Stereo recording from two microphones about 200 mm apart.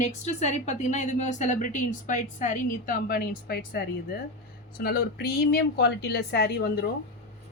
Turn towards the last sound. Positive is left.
turn(degrees=50)  # may be behind; listen again after turning